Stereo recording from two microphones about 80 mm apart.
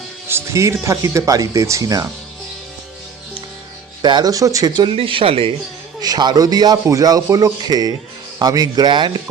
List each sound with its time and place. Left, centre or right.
0.3 s speech: right
4.0 s speech: right
4.3 s speech: right
4.8 s speech: right
6.0 s speech: right
6.8 s speech: right